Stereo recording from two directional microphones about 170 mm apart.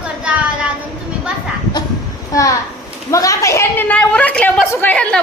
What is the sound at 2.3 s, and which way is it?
A child's voice, 20° left (ahead or behind).